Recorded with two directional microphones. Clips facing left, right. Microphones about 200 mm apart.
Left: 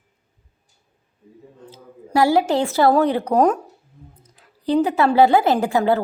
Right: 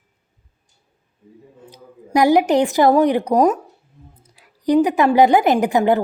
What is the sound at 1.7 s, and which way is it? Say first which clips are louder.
A woman's voice: right 2 dB; 15° right (ahead or behind).